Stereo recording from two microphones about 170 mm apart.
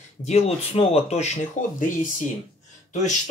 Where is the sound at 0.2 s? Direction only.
40° left (ahead or behind).